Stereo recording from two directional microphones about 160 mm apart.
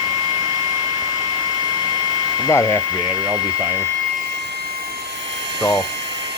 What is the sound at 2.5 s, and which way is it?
Speech, 20° left (ahead or behind).